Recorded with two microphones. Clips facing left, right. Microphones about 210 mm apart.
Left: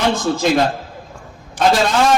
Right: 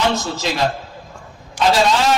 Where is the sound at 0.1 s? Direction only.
50° left (ahead or behind).